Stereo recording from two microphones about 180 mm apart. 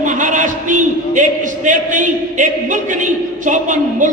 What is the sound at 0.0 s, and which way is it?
A man's voice, 45° right (ahead or behind).